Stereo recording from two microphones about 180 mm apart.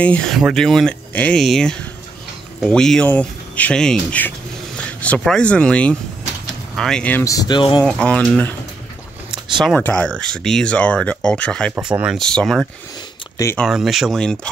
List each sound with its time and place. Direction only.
0.0 s speech: 5° left (ahead or behind); by 7.8 s 25° left (ahead or behind)
7.8 s speech: 5° left (ahead or behind)
9.6 s speech: centre (ahead or behind)
11.7 s speech: 5° right (ahead or behind)
13.4 s speech: 15° left (ahead or behind)
13.7 s speech: centre (ahead or behind)